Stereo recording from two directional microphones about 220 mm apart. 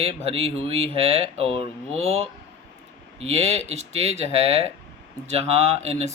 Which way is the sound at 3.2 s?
25° right (ahead or behind).